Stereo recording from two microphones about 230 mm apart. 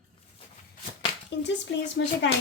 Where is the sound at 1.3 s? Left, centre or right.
Left.